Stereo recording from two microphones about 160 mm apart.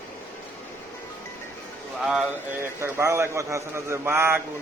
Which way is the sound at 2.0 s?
5° right (ahead or behind).